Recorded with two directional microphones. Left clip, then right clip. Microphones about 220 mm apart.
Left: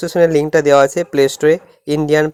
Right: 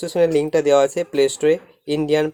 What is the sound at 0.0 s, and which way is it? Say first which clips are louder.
Speech: left 5 dB; 20° left (ahead or behind).